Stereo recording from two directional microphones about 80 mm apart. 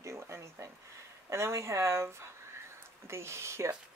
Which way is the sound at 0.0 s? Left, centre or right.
Right.